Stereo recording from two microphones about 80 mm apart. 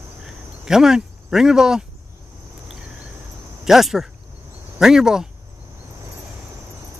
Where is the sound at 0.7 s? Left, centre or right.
Centre.